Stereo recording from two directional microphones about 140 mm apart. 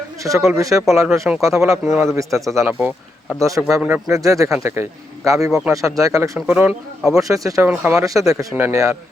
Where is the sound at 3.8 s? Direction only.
10° right (ahead or behind).